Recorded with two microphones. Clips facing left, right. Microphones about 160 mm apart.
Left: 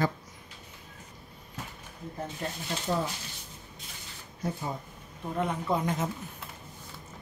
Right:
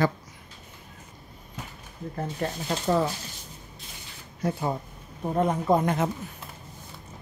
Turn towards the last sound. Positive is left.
turn(degrees=-60)  # may be behind; listen again after turning